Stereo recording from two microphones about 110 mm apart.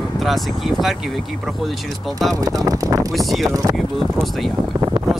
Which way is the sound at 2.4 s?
35° right (ahead or behind).